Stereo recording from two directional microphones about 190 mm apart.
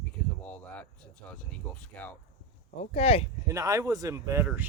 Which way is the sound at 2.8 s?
30° left (ahead or behind).